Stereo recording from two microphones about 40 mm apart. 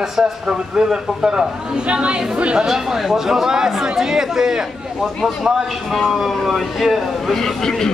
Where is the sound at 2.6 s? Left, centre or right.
Centre.